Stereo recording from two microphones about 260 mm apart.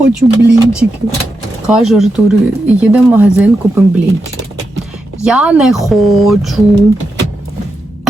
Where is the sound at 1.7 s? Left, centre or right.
Centre.